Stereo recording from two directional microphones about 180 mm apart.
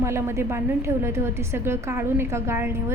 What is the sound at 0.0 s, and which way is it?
A woman's voice, 15° right (ahead or behind).